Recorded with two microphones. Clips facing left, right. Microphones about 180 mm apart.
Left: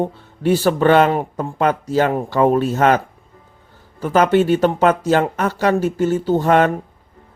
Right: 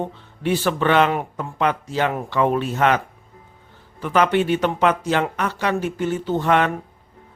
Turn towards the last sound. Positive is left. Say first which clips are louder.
# left 4 dB
turn(degrees=40)  # may be behind; listen again after turning